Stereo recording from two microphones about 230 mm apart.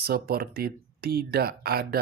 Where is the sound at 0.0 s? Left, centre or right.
Right.